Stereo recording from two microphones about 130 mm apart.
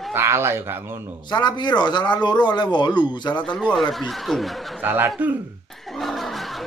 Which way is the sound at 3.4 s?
5° left (ahead or behind).